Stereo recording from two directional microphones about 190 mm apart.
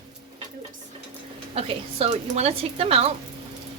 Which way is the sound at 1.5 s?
35° right (ahead or behind).